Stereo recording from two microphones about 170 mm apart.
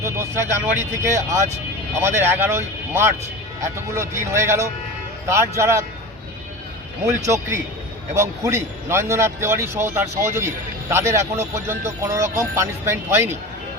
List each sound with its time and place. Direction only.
0.0 s a man's voice: 15° right (ahead or behind)
7.3 s a man's voice: 15° right (ahead or behind)